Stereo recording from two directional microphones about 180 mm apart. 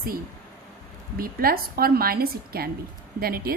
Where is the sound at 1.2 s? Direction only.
55° right (ahead or behind).